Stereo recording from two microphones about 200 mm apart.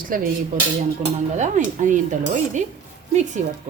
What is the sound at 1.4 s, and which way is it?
Speech, 40° right (ahead or behind).